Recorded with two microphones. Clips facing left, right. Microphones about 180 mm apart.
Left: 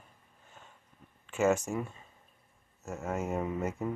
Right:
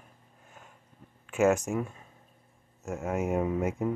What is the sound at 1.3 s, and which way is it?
Speech, 10° right (ahead or behind).